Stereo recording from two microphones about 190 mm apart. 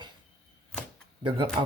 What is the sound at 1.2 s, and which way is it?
Speech, 25° right (ahead or behind).